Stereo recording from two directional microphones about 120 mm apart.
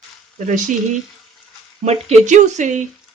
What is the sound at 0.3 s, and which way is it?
Speech, 90° right.